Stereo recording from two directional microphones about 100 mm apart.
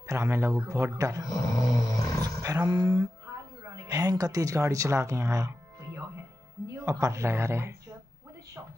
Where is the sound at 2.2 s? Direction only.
35° right (ahead or behind).